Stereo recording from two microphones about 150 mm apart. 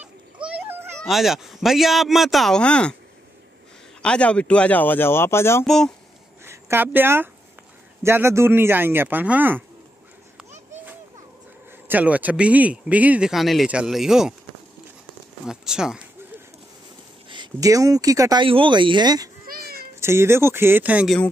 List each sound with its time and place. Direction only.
0.0 s a sound: 10° right (ahead or behind)
0.9 s speech: centre (ahead or behind)
4.0 s speech: 5° left (ahead or behind)
5.7 s speech: 5° left (ahead or behind)
6.4 s speech: 15° right (ahead or behind)
11.9 s speech: 10° right (ahead or behind)
15.4 s speech: 5° right (ahead or behind)
17.3 s speech: 25° right (ahead or behind)
18.4 s speech: 35° right (ahead or behind)
19.4 s cat: 80° right
20.0 s speech: 15° right (ahead or behind)